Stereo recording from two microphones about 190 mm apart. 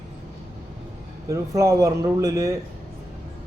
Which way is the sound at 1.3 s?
15° right (ahead or behind).